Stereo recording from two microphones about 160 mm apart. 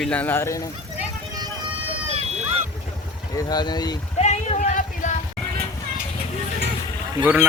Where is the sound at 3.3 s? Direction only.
25° left (ahead or behind).